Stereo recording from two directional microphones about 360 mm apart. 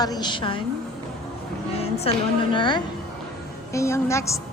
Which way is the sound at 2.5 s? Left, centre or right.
Centre.